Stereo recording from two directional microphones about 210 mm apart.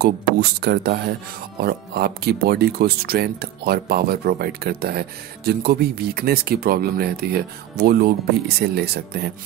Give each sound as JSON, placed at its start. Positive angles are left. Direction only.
{"t": 0.0, "sound": "speech", "side_deg": -50}